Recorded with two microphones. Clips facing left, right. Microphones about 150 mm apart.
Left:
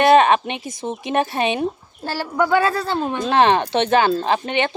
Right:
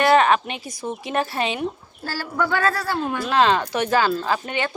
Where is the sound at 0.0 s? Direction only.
20° left (ahead or behind).